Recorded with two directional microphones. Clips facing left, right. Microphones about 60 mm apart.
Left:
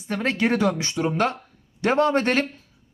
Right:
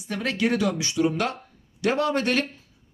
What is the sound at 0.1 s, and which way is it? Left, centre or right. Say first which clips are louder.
A woman's voice: left 2 dB; left.